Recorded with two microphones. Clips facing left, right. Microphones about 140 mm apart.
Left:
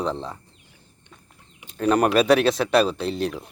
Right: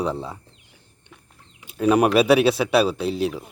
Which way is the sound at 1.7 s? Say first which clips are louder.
Right 2 dB; 10° right (ahead or behind).